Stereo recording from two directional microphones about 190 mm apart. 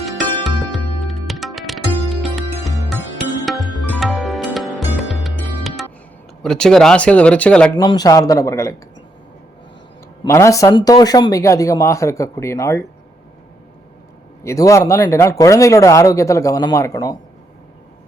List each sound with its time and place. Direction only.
0.0 s music: centre (ahead or behind)
6.4 s speech: 5° left (ahead or behind)
7.8 s speech: 20° left (ahead or behind)
10.2 s speech: 15° left (ahead or behind)
14.4 s speech: 15° left (ahead or behind)